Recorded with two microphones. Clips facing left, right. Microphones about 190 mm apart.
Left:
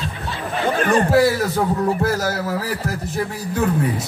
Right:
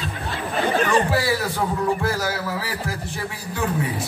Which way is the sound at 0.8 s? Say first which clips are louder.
Left 8 dB; 50° left (ahead or behind).